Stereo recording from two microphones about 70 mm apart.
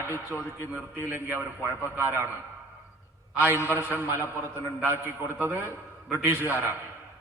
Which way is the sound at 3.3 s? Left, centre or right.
Right.